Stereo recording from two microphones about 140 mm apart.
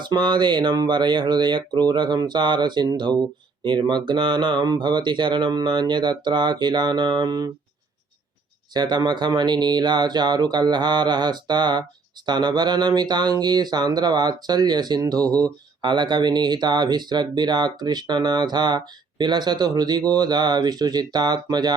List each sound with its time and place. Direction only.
0.0 s speech: 30° right (ahead or behind)
8.7 s speech: 30° right (ahead or behind)